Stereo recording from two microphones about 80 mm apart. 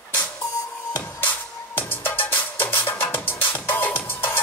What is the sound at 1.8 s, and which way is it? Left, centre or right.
Music, left.